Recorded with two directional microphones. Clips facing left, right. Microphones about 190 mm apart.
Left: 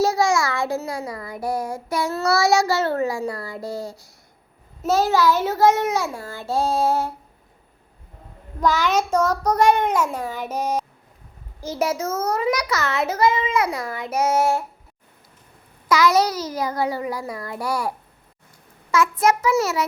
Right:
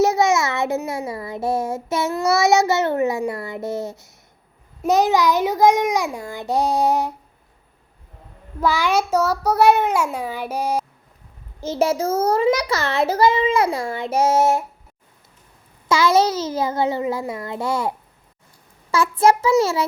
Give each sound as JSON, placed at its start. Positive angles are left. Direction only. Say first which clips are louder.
{"t": 0.0, "sound": "child singing", "louder": "right 2 dB", "side_deg": -20}
{"t": 4.8, "sound": "a child's voice", "louder": "right 2 dB", "side_deg": -15}
{"t": 8.6, "sound": "a child's voice", "louder": "right 1 dB", "side_deg": -10}
{"t": 11.6, "sound": "child singing", "louder": "right 4 dB", "side_deg": -25}
{"t": 15.9, "sound": "child singing", "louder": "right 1 dB", "side_deg": -25}